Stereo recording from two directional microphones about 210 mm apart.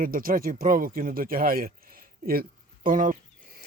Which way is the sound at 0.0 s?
45° right (ahead or behind).